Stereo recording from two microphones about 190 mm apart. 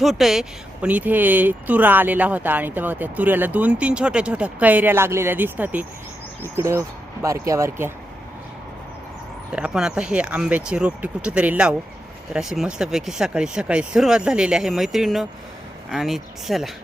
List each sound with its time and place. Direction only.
0.0 s speech: centre (ahead or behind)
9.6 s speech: 5° right (ahead or behind)